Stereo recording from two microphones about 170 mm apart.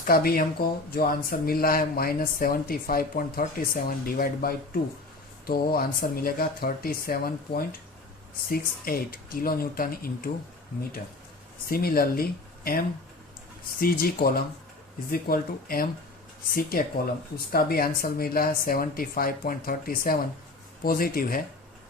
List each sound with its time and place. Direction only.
0.0 s speech: 60° left (ahead or behind)
11.7 s speech: 60° left (ahead or behind)